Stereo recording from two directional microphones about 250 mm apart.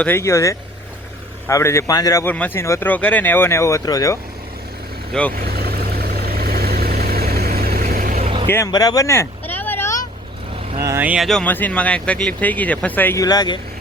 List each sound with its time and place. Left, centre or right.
0.0 s a man's voice: centre
5.3 s vehicle: right
8.4 s vehicle: centre
10.8 s speech: centre